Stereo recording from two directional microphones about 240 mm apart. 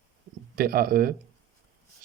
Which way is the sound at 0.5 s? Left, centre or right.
Right.